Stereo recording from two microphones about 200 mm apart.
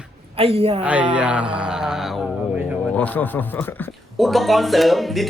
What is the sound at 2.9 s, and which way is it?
A man's voice, 5° left (ahead or behind).